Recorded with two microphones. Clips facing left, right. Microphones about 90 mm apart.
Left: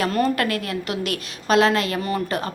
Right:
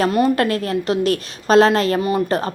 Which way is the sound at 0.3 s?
30° right (ahead or behind).